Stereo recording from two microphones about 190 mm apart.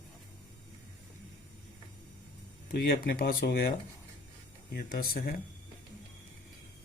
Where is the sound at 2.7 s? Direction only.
60° left (ahead or behind).